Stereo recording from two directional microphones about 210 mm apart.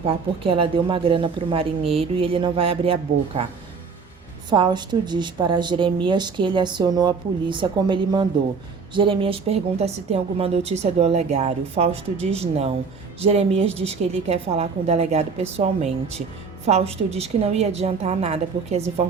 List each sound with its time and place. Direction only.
0.0 s a woman's voice: 25° right (ahead or behind)